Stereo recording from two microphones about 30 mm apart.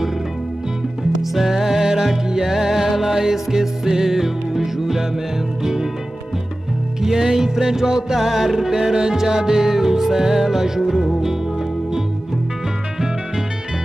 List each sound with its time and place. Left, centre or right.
1.2 s music: centre
7.0 s music: centre
8.2 s music: centre